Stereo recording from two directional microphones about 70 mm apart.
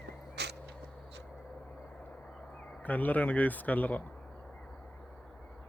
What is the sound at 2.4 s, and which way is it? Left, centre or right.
Speech, centre.